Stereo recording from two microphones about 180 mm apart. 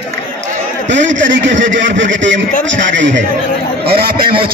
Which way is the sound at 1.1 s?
85° right.